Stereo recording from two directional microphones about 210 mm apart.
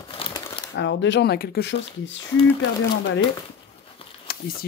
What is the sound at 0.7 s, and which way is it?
Speech, 60° left (ahead or behind).